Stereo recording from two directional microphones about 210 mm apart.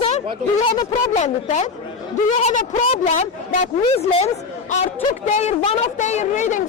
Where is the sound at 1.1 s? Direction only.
30° left (ahead or behind).